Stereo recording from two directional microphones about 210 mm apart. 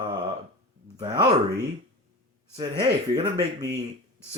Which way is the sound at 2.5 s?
20° right (ahead or behind).